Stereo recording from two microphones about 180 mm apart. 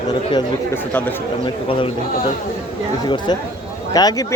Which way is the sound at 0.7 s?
10° left (ahead or behind).